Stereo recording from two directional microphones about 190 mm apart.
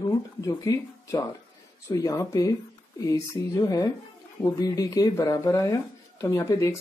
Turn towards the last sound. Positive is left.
turn(degrees=15)  # may be behind; listen again after turning